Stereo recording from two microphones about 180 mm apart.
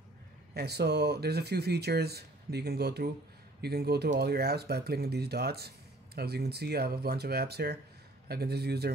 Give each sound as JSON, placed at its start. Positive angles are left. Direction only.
{"t": 0.6, "sound": "speech", "side_deg": -65}